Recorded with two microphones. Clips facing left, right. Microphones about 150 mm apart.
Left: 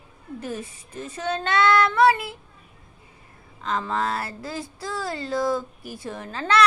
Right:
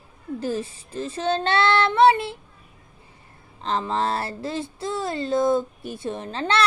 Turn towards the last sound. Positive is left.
turn(degrees=-25)  # may be behind; listen again after turning